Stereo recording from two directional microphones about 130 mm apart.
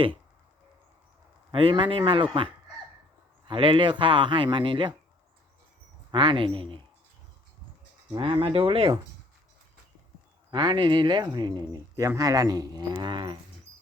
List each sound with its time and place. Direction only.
1.5 s speech: 40° right (ahead or behind)
6.1 s speech: 40° right (ahead or behind)
8.1 s speech: 40° right (ahead or behind)
10.5 s speech: 35° right (ahead or behind)